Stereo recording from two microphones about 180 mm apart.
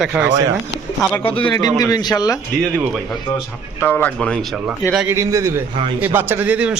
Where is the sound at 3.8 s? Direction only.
10° left (ahead or behind).